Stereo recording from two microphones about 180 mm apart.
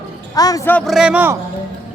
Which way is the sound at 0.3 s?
20° left (ahead or behind).